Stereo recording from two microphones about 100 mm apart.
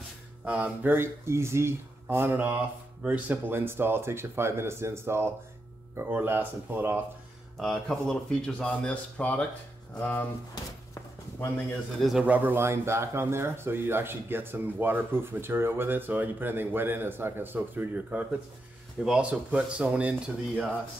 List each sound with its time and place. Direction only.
0.5 s speech: 10° right (ahead or behind)
7.5 s speech: 5° left (ahead or behind)
12.0 s speech: 5° right (ahead or behind)
12.3 s speech: 20° right (ahead or behind)